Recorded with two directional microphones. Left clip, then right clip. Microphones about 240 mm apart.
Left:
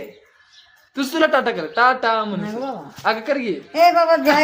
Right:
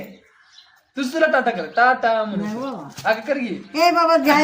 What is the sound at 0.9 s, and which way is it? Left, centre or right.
Speech, left.